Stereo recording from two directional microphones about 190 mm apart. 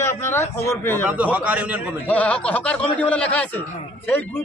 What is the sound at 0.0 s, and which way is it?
A man's voice, 15° left (ahead or behind).